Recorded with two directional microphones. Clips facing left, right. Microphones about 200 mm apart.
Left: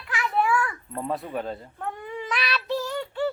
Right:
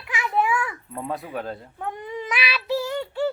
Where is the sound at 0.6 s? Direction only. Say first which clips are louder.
Left 1 dB; 5° right (ahead or behind).